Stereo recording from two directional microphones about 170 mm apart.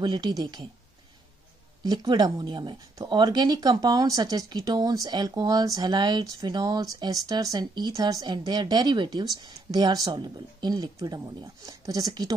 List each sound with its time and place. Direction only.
0.0 s speech: 25° right (ahead or behind)
1.8 s speech: 25° right (ahead or behind)